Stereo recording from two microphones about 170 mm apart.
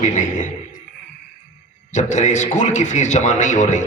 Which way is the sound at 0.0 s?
45° left (ahead or behind).